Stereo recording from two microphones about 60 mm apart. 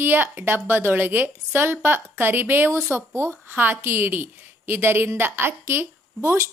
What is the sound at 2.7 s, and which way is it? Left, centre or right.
A woman's voice, right.